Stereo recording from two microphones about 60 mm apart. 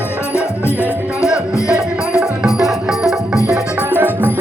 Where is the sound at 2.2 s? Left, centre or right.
Centre.